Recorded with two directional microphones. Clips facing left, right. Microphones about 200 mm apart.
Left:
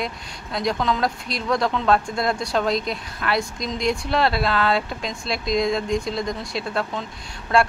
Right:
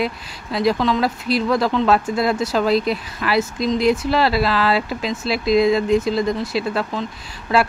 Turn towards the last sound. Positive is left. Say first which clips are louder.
# right 1 dB
turn(degrees=0)  # may be behind; listen again after turning